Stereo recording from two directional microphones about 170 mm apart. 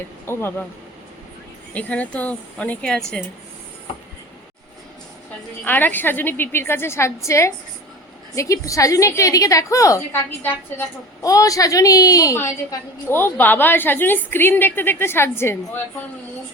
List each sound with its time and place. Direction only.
0.3 s a woman's voice: 15° left (ahead or behind)
1.7 s a woman's voice: 10° left (ahead or behind)
5.6 s a woman's voice: 10° left (ahead or behind)